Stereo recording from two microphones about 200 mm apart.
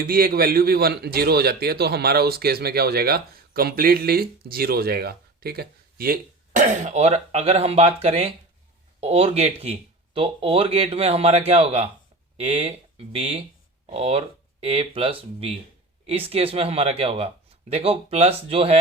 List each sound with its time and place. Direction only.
0.0 s a man's voice: 45° right (ahead or behind); by 18.8 s 30° right (ahead or behind)